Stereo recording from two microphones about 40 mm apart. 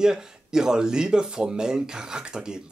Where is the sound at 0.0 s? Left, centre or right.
Centre.